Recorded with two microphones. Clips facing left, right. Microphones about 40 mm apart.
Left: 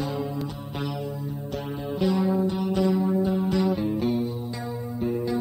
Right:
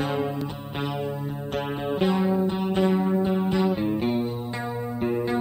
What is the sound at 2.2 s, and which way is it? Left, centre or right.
Music, right.